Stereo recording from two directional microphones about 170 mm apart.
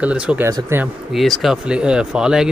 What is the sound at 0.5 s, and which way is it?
Speech, 15° right (ahead or behind).